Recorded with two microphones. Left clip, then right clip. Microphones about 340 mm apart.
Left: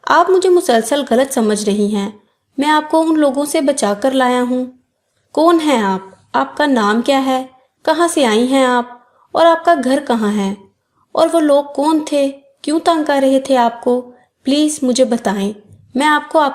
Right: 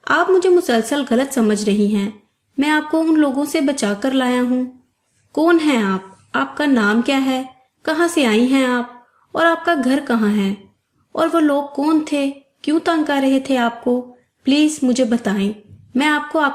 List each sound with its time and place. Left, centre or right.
0.0 s a woman's voice: centre